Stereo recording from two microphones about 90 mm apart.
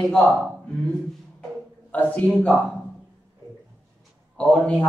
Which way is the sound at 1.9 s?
20° left (ahead or behind).